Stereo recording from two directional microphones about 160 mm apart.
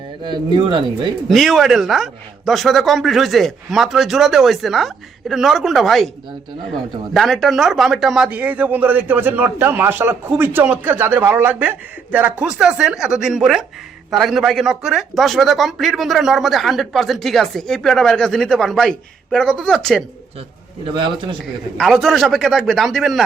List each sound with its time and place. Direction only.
0.3 s speech: 30° right (ahead or behind)
1.3 s speech: centre (ahead or behind)
20.8 s a man's voice: 30° right (ahead or behind)
21.8 s speech: 5° left (ahead or behind)